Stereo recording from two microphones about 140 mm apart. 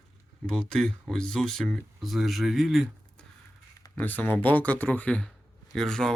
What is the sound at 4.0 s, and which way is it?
Speech, 10° left (ahead or behind).